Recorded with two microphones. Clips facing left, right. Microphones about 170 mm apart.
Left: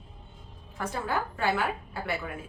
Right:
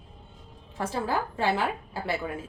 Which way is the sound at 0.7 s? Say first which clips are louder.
Right 2 dB; 30° right (ahead or behind).